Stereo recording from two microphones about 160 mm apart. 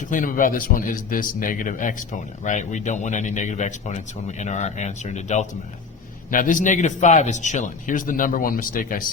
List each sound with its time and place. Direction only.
0.1 s a man's voice: 55° left (ahead or behind)